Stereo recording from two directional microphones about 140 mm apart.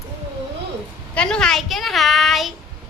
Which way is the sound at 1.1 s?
5° left (ahead or behind).